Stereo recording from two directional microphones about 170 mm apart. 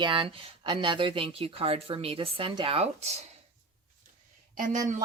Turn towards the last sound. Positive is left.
turn(degrees=-45)  # may be behind; listen again after turning